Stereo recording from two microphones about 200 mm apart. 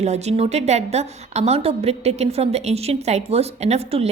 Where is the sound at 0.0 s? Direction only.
35° right (ahead or behind).